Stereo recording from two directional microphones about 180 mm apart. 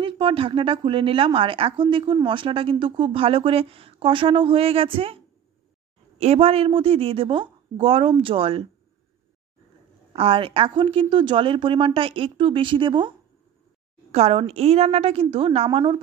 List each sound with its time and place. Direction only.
0.0 s a woman's voice: 30° right (ahead or behind)
10.1 s a woman's voice: 30° right (ahead or behind)
14.1 s a woman's voice: 35° right (ahead or behind)